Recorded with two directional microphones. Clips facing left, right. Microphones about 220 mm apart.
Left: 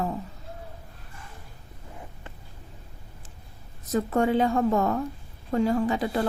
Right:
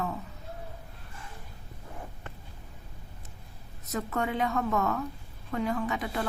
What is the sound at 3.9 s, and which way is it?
A woman's voice, 30° left (ahead or behind).